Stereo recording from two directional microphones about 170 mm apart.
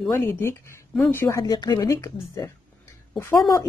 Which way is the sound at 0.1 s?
15° left (ahead or behind).